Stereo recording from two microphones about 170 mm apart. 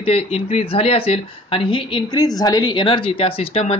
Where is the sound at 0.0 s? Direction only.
35° left (ahead or behind).